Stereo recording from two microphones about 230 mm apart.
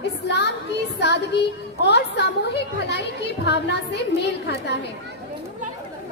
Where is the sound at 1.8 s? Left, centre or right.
Left.